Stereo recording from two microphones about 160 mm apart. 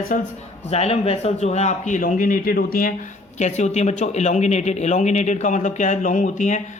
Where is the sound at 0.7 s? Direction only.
40° left (ahead or behind); by 3.0 s 60° left (ahead or behind).